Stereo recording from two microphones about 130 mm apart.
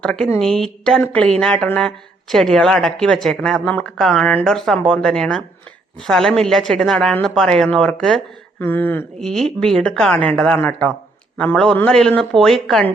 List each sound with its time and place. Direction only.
0.0 s a woman's voice: 5° left (ahead or behind)
9.1 s a woman's voice: 5° left (ahead or behind)